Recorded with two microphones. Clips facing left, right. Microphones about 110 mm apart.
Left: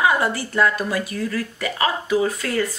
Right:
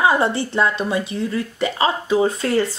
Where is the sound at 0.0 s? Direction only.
30° right (ahead or behind).